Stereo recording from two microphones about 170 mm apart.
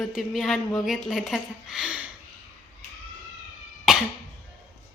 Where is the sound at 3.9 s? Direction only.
Centre (ahead or behind).